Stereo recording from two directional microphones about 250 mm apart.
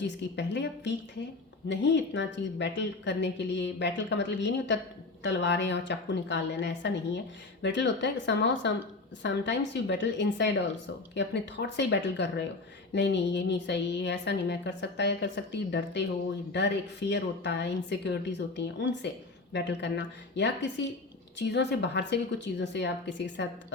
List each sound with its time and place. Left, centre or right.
0.3 s speech: left